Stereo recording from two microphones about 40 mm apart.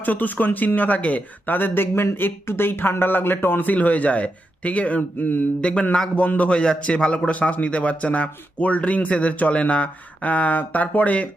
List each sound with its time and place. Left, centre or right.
0.0 s speech: left
1.5 s speech: left
3.7 s speech: left
5.2 s speech: left
6.1 s speech: left
6.6 s a man's voice: left